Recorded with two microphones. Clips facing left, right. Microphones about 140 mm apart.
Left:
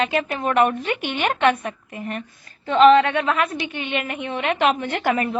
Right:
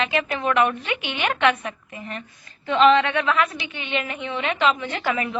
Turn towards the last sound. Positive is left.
turn(degrees=45)  # may be behind; listen again after turning